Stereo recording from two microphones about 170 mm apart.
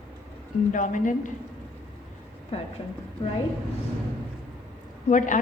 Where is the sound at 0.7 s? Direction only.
50° left (ahead or behind).